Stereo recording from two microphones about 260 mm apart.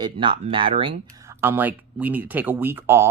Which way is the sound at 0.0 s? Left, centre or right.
Centre.